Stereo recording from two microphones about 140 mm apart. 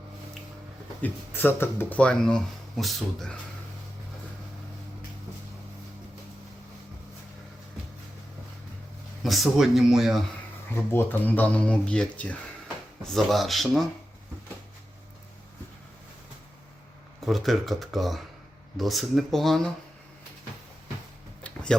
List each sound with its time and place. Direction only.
1.0 s speech: 15° left (ahead or behind)
9.2 s speech: centre (ahead or behind)
10.8 s speech: 15° left (ahead or behind)
17.2 s speech: centre (ahead or behind)
21.4 s a sound: 5° left (ahead or behind)